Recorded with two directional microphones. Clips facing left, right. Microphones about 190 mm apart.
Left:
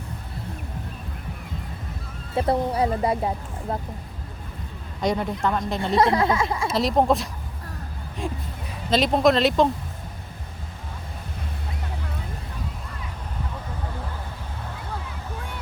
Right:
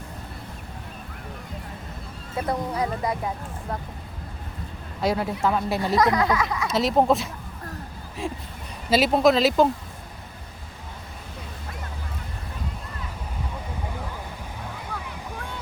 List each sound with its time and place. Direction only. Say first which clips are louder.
2.3 s speech: left 4 dB; 30° left (ahead or behind)
4.9 s speech: even; 5° right (ahead or behind)
5.9 s speech: left 2 dB; 30° left (ahead or behind)
6.7 s speech: right 1 dB; centre (ahead or behind)